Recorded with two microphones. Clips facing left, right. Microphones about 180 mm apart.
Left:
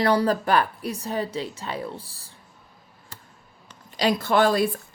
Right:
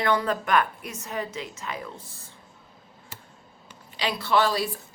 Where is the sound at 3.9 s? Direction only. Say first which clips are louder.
Left 3 dB; 45° left (ahead or behind).